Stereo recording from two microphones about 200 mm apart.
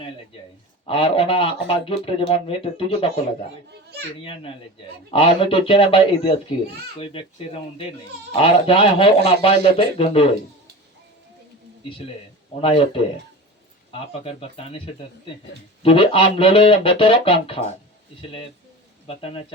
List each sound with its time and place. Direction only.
0.9 s speech: 25° left (ahead or behind)
4.2 s speech: 25° left (ahead or behind)
8.4 s speech: 30° left (ahead or behind)
11.9 s speech: 30° left (ahead or behind)
15.8 s speech: 30° left (ahead or behind)
19.0 s speech: 30° left (ahead or behind)